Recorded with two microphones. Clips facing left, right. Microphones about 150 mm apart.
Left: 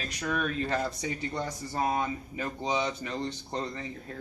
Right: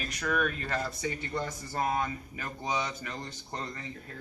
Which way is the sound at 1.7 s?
15° left (ahead or behind).